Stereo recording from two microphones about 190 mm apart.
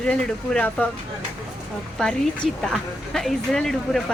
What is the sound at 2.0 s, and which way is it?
A woman's voice, 5° left (ahead or behind).